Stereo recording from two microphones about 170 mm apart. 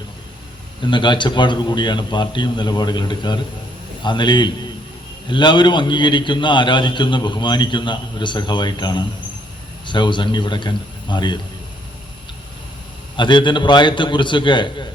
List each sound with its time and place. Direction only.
0.8 s a man's voice: 25° left (ahead or behind)
13.1 s a man's voice: 25° left (ahead or behind)